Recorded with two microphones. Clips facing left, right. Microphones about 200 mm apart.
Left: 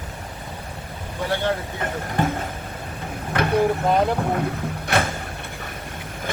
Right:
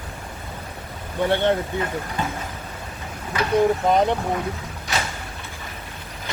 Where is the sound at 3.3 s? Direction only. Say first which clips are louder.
Left 2 dB; 55° left (ahead or behind).